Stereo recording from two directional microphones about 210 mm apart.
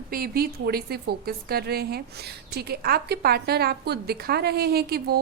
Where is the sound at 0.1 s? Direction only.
45° right (ahead or behind).